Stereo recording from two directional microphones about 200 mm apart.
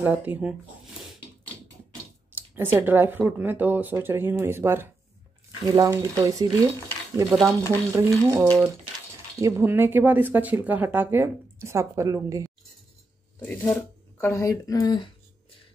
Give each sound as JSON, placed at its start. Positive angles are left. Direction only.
{"t": 0.0, "sound": "speech", "side_deg": -10}
{"t": 2.3, "sound": "speech", "side_deg": -10}
{"t": 13.4, "sound": "speech", "side_deg": 10}